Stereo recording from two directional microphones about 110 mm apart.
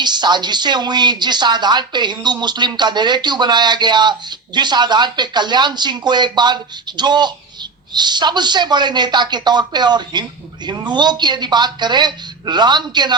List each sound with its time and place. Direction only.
0.0 s speech: 40° right (ahead or behind)